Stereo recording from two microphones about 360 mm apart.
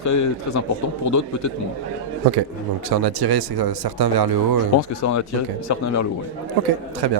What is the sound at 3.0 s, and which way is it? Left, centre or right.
Speech, right.